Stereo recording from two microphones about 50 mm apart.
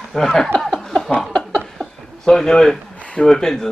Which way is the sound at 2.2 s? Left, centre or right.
Centre.